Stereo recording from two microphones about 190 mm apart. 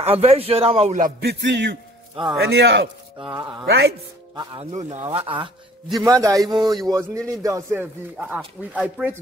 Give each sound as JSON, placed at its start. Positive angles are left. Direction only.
{"t": 0.0, "sound": "a man's voice", "side_deg": -35}
{"t": 1.2, "sound": "a man's voice", "side_deg": -65}
{"t": 3.2, "sound": "a man's voice", "side_deg": -25}
{"t": 3.6, "sound": "a man's voice", "side_deg": -60}
{"t": 4.4, "sound": "a man's voice", "side_deg": -25}
{"t": 4.7, "sound": "a man's voice", "side_deg": -35}